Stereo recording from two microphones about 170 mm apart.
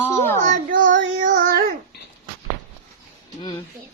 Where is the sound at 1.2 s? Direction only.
55° right (ahead or behind).